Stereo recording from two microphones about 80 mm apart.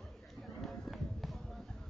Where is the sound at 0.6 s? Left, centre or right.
Centre.